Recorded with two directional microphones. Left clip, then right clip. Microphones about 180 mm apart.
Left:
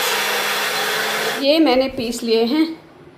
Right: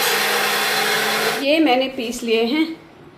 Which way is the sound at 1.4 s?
15° left (ahead or behind).